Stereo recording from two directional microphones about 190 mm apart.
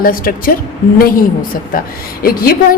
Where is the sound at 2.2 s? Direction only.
50° left (ahead or behind).